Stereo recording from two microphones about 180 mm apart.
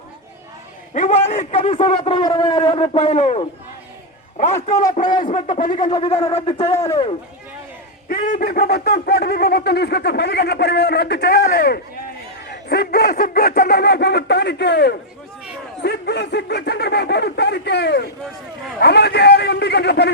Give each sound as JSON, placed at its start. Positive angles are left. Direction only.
{"t": 0.9, "sound": "a man's voice", "side_deg": 40}
{"t": 5.2, "sound": "speech", "side_deg": 45}
{"t": 6.2, "sound": "a man's voice", "side_deg": 30}
{"t": 6.7, "sound": "speech", "side_deg": 15}
{"t": 8.0, "sound": "speech", "side_deg": 55}